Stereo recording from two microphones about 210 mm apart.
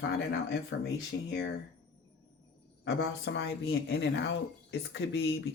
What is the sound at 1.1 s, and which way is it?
Speech, 50° left (ahead or behind).